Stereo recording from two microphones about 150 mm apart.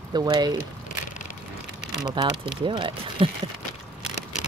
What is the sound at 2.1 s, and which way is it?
Speech, 30° right (ahead or behind).